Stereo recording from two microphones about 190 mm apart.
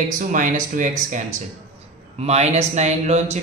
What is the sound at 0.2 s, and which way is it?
Speech, 45° right (ahead or behind).